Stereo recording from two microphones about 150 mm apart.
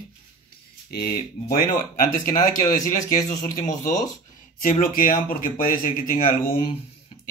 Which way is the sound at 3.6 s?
55° left (ahead or behind).